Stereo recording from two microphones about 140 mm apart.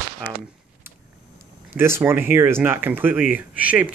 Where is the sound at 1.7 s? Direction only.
15° right (ahead or behind).